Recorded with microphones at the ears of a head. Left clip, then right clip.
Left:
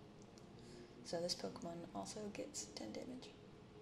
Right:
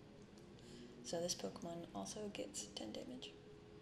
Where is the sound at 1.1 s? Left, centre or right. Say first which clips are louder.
Even; centre.